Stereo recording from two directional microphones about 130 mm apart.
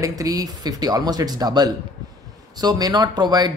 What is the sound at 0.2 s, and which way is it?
Speech, 30° right (ahead or behind).